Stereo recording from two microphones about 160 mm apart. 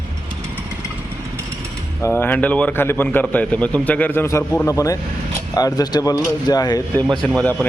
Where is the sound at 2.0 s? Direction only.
15° left (ahead or behind).